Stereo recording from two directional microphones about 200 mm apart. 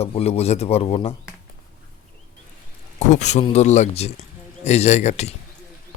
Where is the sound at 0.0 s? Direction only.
30° left (ahead or behind).